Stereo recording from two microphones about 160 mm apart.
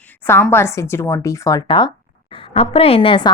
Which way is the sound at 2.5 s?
35° left (ahead or behind).